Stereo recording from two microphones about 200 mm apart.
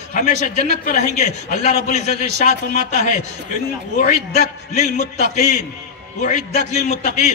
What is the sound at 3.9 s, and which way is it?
A man's voice, 35° left (ahead or behind).